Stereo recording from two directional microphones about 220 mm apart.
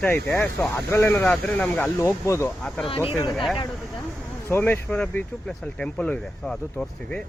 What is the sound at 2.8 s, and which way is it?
Speech, 25° left (ahead or behind).